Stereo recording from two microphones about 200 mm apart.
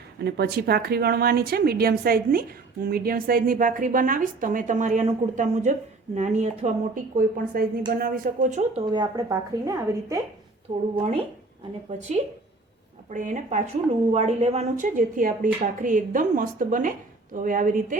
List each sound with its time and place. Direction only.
0.3 s a woman's voice: 50° right (ahead or behind); by 8.8 s 35° right (ahead or behind)
8.9 s a woman's voice: 20° right (ahead or behind)
11.9 s speech: 35° right (ahead or behind)